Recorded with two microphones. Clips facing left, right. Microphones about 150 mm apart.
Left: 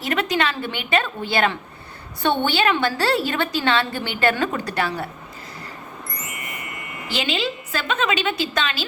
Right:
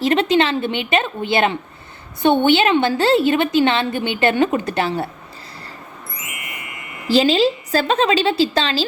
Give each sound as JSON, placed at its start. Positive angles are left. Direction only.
{"t": 0.0, "sound": "a woman's voice", "side_deg": -25}
{"t": 6.1, "sound": "a sound", "side_deg": -10}
{"t": 7.1, "sound": "a woman's voice", "side_deg": -35}